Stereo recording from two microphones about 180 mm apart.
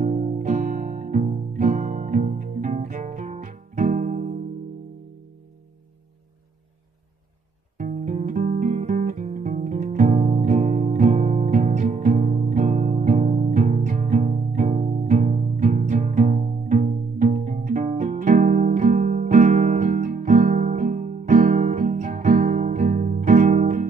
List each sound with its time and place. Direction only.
0.0 s music: 45° right (ahead or behind)
7.7 s music: 40° right (ahead or behind)